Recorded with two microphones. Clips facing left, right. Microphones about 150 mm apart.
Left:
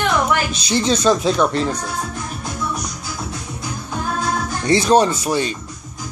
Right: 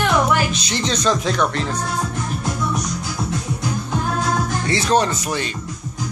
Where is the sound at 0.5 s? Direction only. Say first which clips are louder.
Left 4 dB; 10° left (ahead or behind).